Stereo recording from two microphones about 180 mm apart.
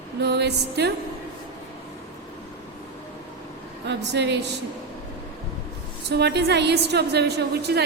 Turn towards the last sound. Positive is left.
turn(degrees=-65)  # may be behind; listen again after turning